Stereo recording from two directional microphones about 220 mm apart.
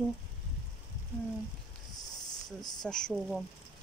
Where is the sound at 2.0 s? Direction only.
15° left (ahead or behind).